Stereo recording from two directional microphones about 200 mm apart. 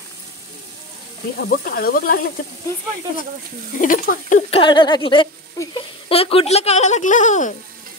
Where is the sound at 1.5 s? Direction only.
45° left (ahead or behind).